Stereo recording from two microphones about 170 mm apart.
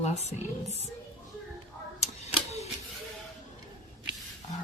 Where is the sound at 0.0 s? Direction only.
40° left (ahead or behind).